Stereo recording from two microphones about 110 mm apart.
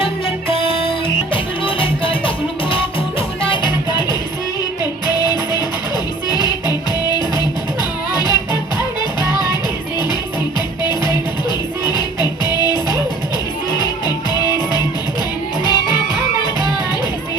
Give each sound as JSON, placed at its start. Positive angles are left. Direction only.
{"t": 0.0, "sound": "music", "side_deg": 55}
{"t": 5.3, "sound": "music", "side_deg": 40}
{"t": 11.9, "sound": "music", "side_deg": 40}